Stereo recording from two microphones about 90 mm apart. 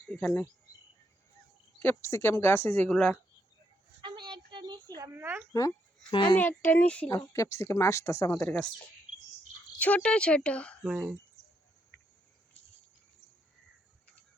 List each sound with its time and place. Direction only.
1.8 s speech: 25° left (ahead or behind)
4.0 s a sound: 60° right (ahead or behind)
5.1 s speech: 20° right (ahead or behind)
6.1 s a child's voice: 65° left (ahead or behind)
6.3 s speech: 20° left (ahead or behind)
7.3 s speech: 30° left (ahead or behind)
8.4 s speech: 15° left (ahead or behind)
9.7 s speech: 15° left (ahead or behind)
10.8 s speech: 10° right (ahead or behind)